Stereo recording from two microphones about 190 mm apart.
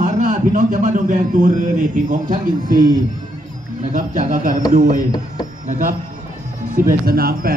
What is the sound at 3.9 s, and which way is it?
Speech, 45° right (ahead or behind).